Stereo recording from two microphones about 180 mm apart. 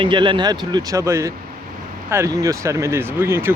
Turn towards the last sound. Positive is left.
turn(degrees=-15)  # may be behind; listen again after turning